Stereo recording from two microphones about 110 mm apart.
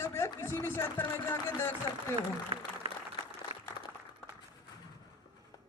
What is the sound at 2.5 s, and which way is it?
Speech, 55° right (ahead or behind).